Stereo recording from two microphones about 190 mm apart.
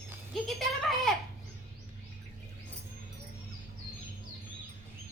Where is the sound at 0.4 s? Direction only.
Centre (ahead or behind).